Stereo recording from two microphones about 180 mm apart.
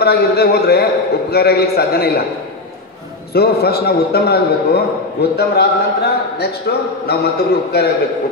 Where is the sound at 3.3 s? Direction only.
60° left (ahead or behind).